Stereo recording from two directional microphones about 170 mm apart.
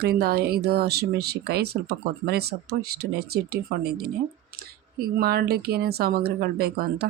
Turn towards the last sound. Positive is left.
turn(degrees=-65)  # may be behind; listen again after turning